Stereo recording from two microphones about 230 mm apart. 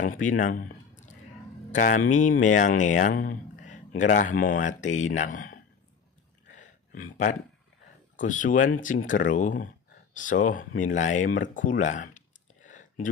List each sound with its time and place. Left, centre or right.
0.0 s speech: left
8.2 s speech: left
12.6 s a sound: left